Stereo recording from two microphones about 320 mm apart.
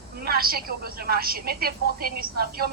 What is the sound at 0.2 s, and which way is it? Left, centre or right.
A woman's voice, right.